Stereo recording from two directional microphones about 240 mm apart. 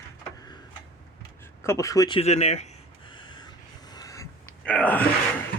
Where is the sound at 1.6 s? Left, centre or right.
Centre; by 2.7 s left.